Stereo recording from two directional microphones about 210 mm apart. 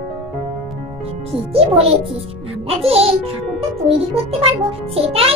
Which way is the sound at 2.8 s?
30° right (ahead or behind).